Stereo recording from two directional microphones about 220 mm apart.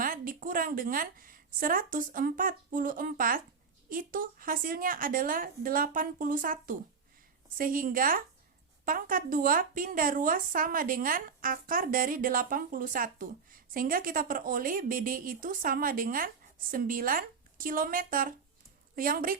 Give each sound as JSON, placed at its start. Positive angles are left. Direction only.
{"t": 0.0, "sound": "a woman's voice", "side_deg": -40}